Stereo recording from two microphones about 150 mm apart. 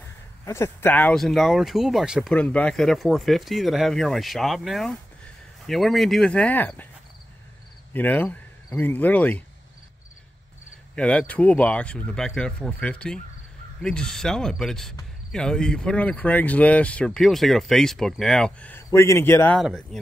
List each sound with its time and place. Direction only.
0.5 s speech: 15° left (ahead or behind); by 2.3 s centre (ahead or behind)
2.3 s speech: 10° left (ahead or behind)
7.9 s speech: 10° left (ahead or behind)
11.0 s speech: 10° left (ahead or behind)
19.5 s speech: centre (ahead or behind)